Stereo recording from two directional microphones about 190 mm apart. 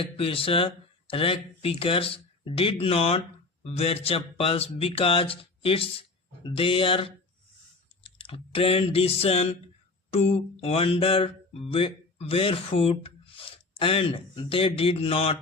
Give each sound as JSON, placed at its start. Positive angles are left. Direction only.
{"t": 0.2, "sound": "speech", "side_deg": 30}